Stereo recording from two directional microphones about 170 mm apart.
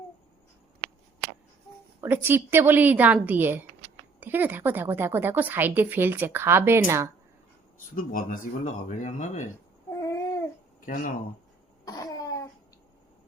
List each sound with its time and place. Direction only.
2.0 s a woman's voice: 10° right (ahead or behind)
7.9 s speech: 55° left (ahead or behind)
9.9 s babbling: 20° left (ahead or behind)
10.8 s speech: 55° left (ahead or behind)
11.9 s cough: 20° left (ahead or behind)